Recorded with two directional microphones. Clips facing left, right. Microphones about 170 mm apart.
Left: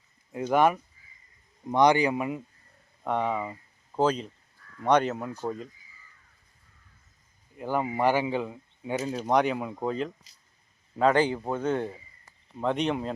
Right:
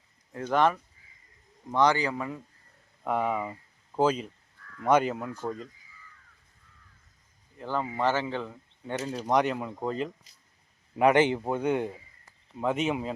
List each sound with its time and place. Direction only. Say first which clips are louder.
0.3 s speech: left 2 dB; 10° left (ahead or behind)
3.0 s speech: even; 5° right (ahead or behind)
5.3 s speech: left 1 dB; 10° left (ahead or behind)
7.6 s speech: left 3 dB; 15° left (ahead or behind)
10.9 s a man's voice: right 1 dB; 20° right (ahead or behind)
12.5 s speech: left 1 dB; 5° right (ahead or behind)